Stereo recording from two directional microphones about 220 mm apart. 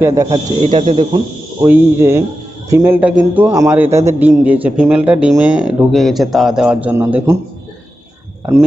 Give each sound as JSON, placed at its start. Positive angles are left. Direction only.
{"t": 0.0, "sound": "a man's voice", "side_deg": -15}
{"t": 1.7, "sound": "a man's voice", "side_deg": -10}